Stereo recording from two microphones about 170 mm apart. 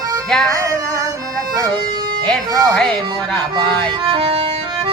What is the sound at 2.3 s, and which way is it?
Speech, 5° left (ahead or behind).